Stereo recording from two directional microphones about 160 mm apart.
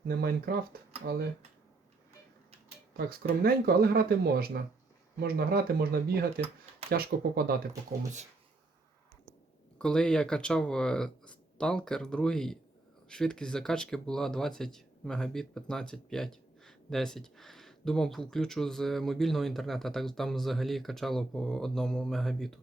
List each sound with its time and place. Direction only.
0.1 s speech: 70° right (ahead or behind)
3.0 s speech: 65° right (ahead or behind)
9.7 s speech: 5° left (ahead or behind)